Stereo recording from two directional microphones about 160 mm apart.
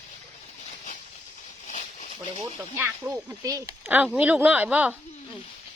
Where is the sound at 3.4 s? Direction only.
20° right (ahead or behind).